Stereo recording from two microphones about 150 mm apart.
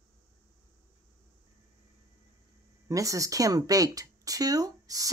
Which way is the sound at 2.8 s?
20° right (ahead or behind).